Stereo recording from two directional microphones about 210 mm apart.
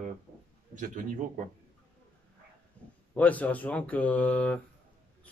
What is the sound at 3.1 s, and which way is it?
Speech, 5° left (ahead or behind).